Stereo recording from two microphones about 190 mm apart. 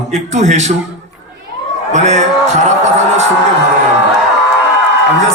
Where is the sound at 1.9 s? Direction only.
35° right (ahead or behind).